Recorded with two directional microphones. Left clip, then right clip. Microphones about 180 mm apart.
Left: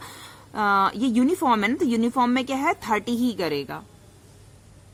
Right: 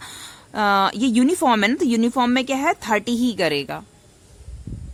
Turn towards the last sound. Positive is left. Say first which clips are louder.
# right 5 dB
turn(degrees=-30)  # may be behind; listen again after turning